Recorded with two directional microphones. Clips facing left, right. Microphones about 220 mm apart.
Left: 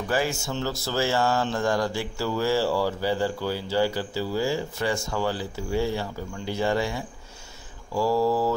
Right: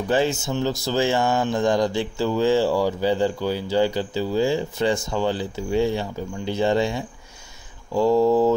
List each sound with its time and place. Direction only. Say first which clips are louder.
0.1 s speech: right 5 dB; 20° right (ahead or behind)